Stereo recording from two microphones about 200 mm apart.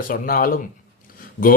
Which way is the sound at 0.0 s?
45° left (ahead or behind).